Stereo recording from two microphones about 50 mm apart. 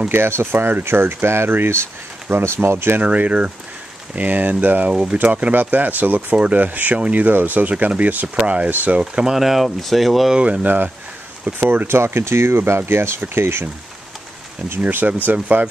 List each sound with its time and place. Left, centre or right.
0.1 s speech: right
3.0 s speech: right
4.8 s speech: right
9.0 s speech: centre
10.3 s speech: right
11.6 s speech: right
14.7 s speech: right